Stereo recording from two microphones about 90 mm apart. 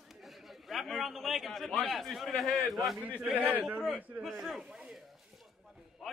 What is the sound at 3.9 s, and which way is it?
Speech, 20° right (ahead or behind).